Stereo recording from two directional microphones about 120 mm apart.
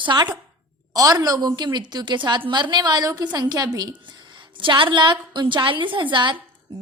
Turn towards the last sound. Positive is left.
turn(degrees=-40)  # may be behind; listen again after turning